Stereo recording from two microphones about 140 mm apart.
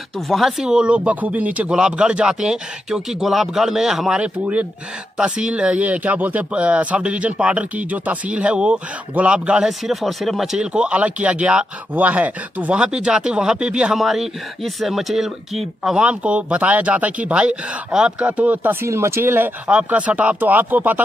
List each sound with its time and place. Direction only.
0.3 s speech: centre (ahead or behind)